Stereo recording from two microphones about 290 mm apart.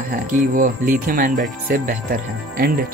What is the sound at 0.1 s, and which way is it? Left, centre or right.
Speech, right.